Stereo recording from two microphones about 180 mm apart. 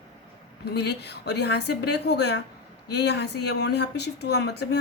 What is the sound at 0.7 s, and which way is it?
A woman's voice, 65° left (ahead or behind).